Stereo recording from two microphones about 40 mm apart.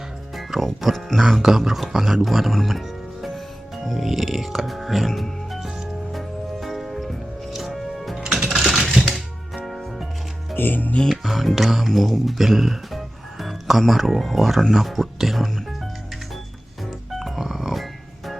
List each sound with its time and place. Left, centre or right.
0.3 s speech: centre
3.8 s music: centre
8.3 s typing: centre
9.6 s music: centre
10.5 s speech: left
11.1 s speech: centre
17.2 s a sound: centre